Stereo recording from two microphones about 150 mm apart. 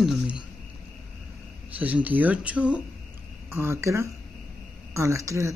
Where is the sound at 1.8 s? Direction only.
10° right (ahead or behind).